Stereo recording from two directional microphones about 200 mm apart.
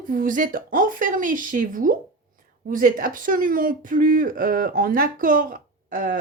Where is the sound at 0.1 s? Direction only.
40° right (ahead or behind).